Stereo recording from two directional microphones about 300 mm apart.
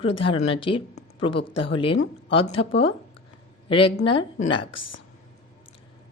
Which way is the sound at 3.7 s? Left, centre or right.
Centre.